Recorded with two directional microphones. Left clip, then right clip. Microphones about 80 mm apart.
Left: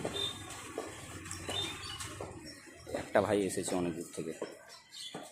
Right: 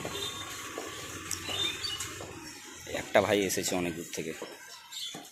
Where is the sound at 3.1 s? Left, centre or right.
Centre.